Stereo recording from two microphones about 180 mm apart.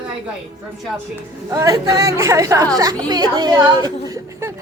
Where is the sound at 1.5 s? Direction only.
20° right (ahead or behind).